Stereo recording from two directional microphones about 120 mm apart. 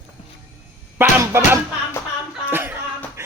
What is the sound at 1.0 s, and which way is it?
Speech, 20° right (ahead or behind).